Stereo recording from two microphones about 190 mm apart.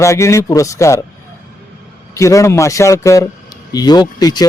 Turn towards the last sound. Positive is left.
turn(degrees=20)  # may be behind; listen again after turning